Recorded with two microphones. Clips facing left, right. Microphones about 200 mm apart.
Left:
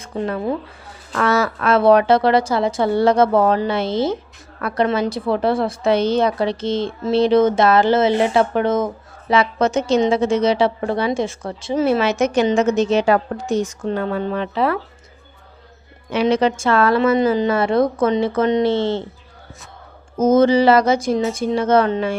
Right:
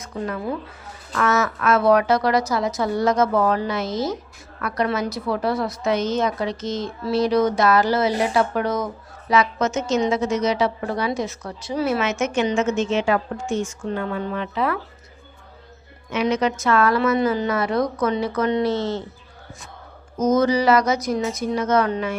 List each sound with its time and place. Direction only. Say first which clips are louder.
0.0 s a woman's voice: left 5 dB; 30° left (ahead or behind)
16.0 s a woman's voice: left 4 dB; 30° left (ahead or behind)
20.1 s a woman's voice: left 5 dB; 25° left (ahead or behind)